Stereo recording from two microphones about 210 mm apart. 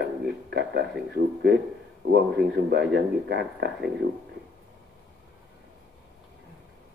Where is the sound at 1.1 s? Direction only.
50° right (ahead or behind).